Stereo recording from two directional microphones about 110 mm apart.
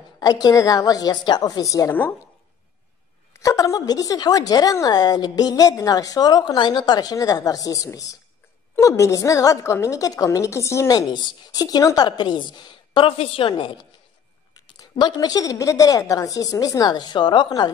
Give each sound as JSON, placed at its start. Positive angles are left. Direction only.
{"t": 0.2, "sound": "a woman's voice", "side_deg": 35}
{"t": 3.3, "sound": "a woman's voice", "side_deg": 30}
{"t": 13.2, "sound": "a woman's voice", "side_deg": 55}